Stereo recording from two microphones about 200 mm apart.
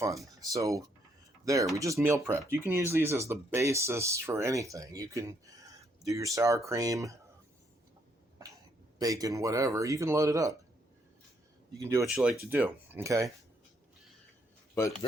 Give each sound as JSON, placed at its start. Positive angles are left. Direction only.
{"t": 0.3, "sound": "speech", "side_deg": -15}
{"t": 9.0, "sound": "speech", "side_deg": -15}
{"t": 11.8, "sound": "speech", "side_deg": -15}
{"t": 12.0, "sound": "speech", "side_deg": 0}